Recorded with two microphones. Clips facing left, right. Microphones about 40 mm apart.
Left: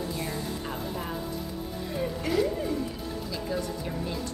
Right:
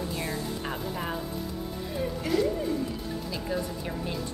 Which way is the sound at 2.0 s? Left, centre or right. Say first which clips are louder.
Even; centre.